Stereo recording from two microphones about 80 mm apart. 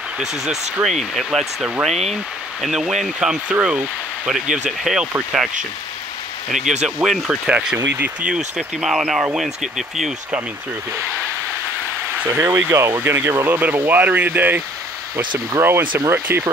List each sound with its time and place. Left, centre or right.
0.2 s speech: centre
6.5 s speech: centre
7.7 s speech: right
8.3 s speech: centre
12.2 s speech: right
15.6 s speech: right